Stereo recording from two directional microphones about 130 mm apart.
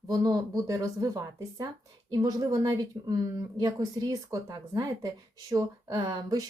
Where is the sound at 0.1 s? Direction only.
30° right (ahead or behind).